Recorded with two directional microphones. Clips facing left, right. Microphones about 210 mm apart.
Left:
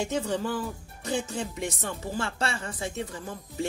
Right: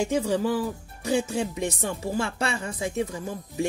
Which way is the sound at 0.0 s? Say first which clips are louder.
Right 4 dB; 10° right (ahead or behind).